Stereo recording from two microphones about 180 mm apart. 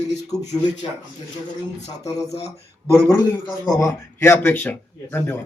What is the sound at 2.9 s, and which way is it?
Speech, 15° left (ahead or behind).